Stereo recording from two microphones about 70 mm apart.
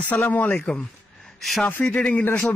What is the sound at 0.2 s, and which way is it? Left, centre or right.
Speech, left.